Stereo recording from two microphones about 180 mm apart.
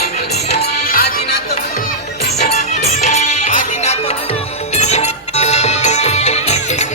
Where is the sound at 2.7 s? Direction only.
40° left (ahead or behind).